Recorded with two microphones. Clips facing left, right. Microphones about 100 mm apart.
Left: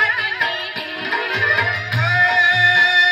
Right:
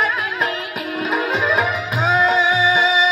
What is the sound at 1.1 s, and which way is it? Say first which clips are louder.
Music: right 2 dB; 30° right (ahead or behind).